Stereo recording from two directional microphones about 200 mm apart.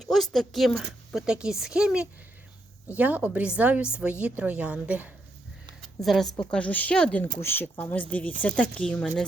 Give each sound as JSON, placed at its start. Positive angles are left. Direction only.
{"t": 0.0, "sound": "a woman's voice", "side_deg": 0}